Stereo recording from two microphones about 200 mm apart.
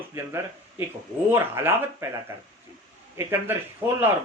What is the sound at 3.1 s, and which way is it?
Speech, 15° right (ahead or behind).